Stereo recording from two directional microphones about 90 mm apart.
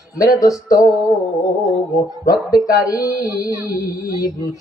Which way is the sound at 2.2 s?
40° left (ahead or behind).